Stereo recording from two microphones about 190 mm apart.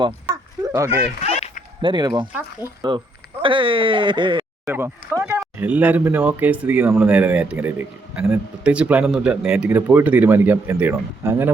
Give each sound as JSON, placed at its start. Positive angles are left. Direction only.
{"t": 0.3, "sound": "a sound", "side_deg": -15}
{"t": 1.2, "sound": "a sound", "side_deg": 35}
{"t": 1.8, "sound": "speech", "side_deg": -25}
{"t": 2.6, "sound": "speech", "side_deg": -10}
{"t": 3.4, "sound": "speech", "side_deg": -25}
{"t": 4.6, "sound": "speech", "side_deg": -10}